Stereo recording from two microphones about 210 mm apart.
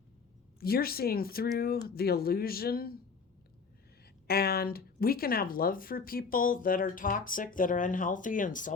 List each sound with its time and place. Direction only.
0.6 s speech: 45° left (ahead or behind)
4.3 s speech: 45° left (ahead or behind)